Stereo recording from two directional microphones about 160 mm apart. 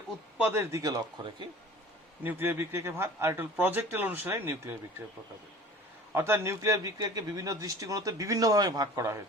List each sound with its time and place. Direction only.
0.3 s a man's voice: 10° right (ahead or behind); by 1.5 s 25° right (ahead or behind)
2.2 s speech: 15° right (ahead or behind)
6.1 s a man's voice: 15° right (ahead or behind)